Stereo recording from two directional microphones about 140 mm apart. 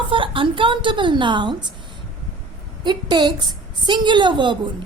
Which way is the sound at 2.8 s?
30° right (ahead or behind).